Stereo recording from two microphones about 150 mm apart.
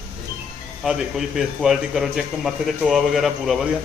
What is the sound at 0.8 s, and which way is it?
A man's voice, 5° right (ahead or behind).